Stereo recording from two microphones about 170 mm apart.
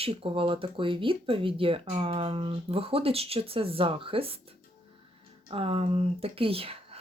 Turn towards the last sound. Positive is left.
turn(degrees=-35)  # may be behind; listen again after turning